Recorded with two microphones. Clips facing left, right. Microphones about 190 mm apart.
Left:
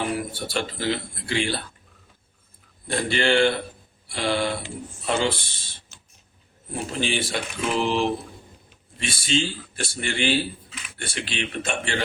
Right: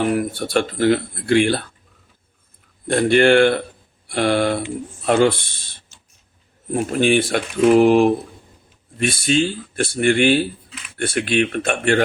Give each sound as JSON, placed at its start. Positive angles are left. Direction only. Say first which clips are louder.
{"t": 0.1, "sound": "speech", "louder": "right 8 dB", "side_deg": -55}
{"t": 2.8, "sound": "speech", "louder": "right 9 dB", "side_deg": -55}
{"t": 6.7, "sound": "speech", "louder": "right 10 dB", "side_deg": -55}